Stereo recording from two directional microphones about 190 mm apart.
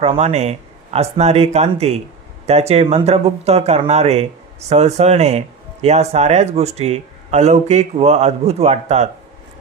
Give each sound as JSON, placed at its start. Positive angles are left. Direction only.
{"t": 0.0, "sound": "speech", "side_deg": -35}